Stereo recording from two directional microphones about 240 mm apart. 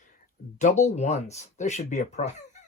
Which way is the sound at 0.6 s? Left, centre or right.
Left.